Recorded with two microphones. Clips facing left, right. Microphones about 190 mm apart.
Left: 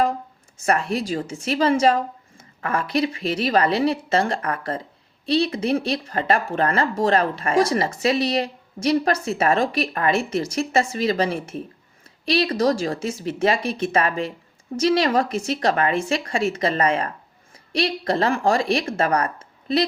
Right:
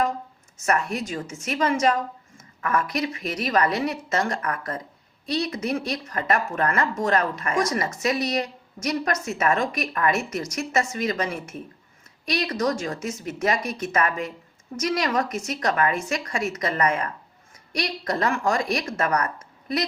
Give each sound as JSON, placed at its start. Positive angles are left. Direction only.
{"t": 0.6, "sound": "a woman's voice", "side_deg": 30}